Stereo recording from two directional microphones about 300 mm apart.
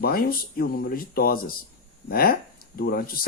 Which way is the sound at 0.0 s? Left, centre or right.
Left.